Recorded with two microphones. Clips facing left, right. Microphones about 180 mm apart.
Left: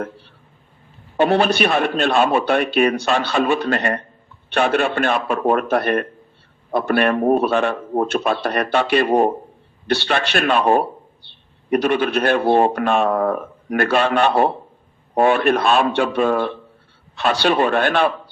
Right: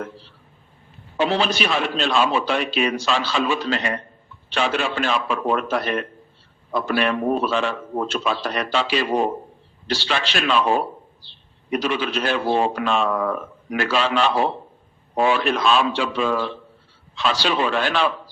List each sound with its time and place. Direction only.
1.2 s a man's voice: 60° left (ahead or behind)